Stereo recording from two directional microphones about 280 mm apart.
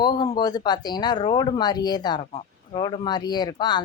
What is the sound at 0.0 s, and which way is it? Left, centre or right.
Speech, centre.